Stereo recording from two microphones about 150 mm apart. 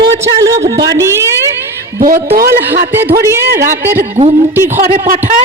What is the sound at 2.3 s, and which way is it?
Speech, 80° right.